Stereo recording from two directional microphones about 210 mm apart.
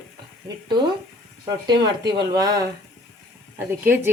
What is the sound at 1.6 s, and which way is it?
Speech, 20° right (ahead or behind).